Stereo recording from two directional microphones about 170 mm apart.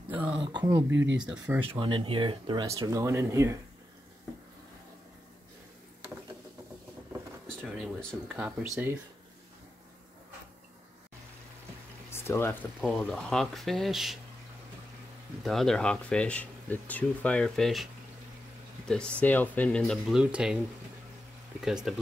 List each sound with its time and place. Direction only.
0.1 s speech: 10° right (ahead or behind)
0.4 s speech: 25° right (ahead or behind)
1.1 s speech: 5° right (ahead or behind)
1.7 s speech: 30° right (ahead or behind)
2.6 s speech: 20° right (ahead or behind)
7.4 s speech: centre (ahead or behind)
8.3 s speech: 10° right (ahead or behind)
12.1 s speech: 15° left (ahead or behind); by 14.2 s centre (ahead or behind)
15.4 s speech: centre (ahead or behind)
18.9 s speech: 5° left (ahead or behind)
21.5 s speech: 5° right (ahead or behind)